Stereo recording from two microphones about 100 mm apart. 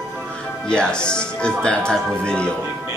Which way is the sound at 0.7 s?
10° left (ahead or behind).